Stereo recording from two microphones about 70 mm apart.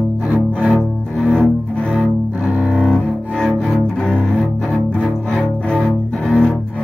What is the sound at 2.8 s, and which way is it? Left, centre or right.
Cello, centre.